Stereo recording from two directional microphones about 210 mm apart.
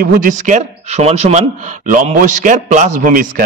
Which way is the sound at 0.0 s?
40° right (ahead or behind).